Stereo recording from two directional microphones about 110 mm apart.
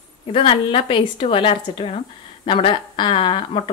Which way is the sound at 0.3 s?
55° left (ahead or behind).